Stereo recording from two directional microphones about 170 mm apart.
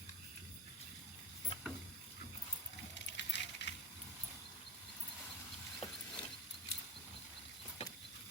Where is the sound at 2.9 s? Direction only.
90° left.